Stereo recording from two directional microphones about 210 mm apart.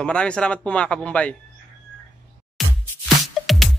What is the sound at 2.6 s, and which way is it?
Music, centre (ahead or behind).